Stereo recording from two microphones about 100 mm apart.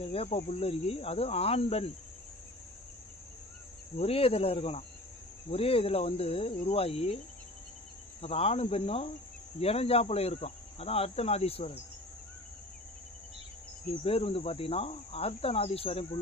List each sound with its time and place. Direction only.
0.0 s speech: 80° left
3.9 s cricket: 85° left
8.2 s speech: 80° left
9.6 s speech: 90° left
14.0 s cricket: 75° left (ahead or behind)